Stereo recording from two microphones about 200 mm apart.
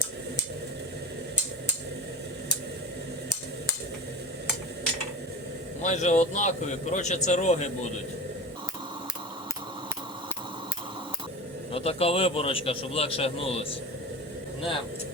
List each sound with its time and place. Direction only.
5.8 s a man's voice: 35° left (ahead or behind)
11.7 s a man's voice: 30° left (ahead or behind)